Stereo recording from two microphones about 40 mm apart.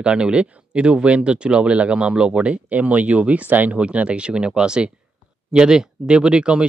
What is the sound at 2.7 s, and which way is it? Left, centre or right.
Speech, right.